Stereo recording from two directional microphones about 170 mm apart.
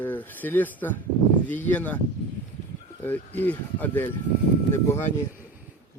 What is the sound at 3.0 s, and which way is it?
A man's voice, 10° left (ahead or behind).